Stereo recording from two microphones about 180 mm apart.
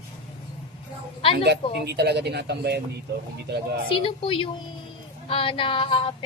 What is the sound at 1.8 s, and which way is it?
A man's voice, 65° right (ahead or behind).